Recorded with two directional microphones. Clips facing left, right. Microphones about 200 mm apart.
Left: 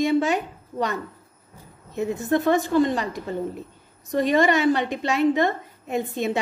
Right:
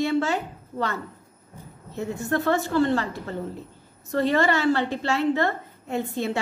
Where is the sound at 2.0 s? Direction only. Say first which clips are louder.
Left 4 dB; 20° left (ahead or behind).